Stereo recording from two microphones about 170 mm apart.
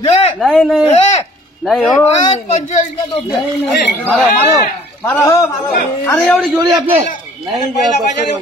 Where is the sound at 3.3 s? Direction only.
Centre (ahead or behind).